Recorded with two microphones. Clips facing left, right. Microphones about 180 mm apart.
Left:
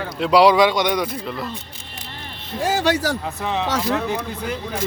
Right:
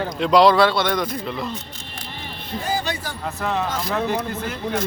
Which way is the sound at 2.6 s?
90° left.